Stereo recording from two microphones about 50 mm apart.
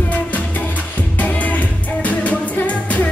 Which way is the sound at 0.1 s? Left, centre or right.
Left.